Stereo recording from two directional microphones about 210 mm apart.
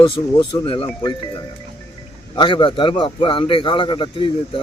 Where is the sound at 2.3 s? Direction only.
25° left (ahead or behind).